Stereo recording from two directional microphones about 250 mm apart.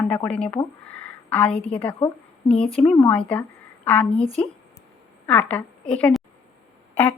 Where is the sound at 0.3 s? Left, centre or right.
Centre.